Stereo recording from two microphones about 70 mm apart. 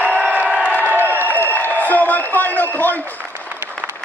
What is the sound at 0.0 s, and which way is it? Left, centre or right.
Crowd, right.